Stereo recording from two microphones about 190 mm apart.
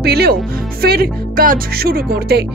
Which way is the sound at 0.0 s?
55° right (ahead or behind).